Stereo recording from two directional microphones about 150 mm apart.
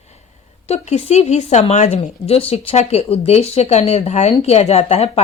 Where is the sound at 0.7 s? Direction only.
45° left (ahead or behind).